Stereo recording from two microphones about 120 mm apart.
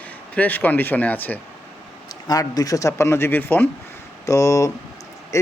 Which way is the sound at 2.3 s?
30° left (ahead or behind).